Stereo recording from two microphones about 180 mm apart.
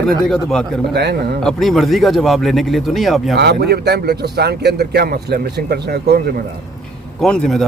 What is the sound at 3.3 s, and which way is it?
Speech, 65° right (ahead or behind).